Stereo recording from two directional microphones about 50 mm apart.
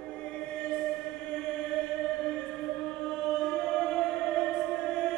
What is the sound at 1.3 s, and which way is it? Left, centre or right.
Chant, centre.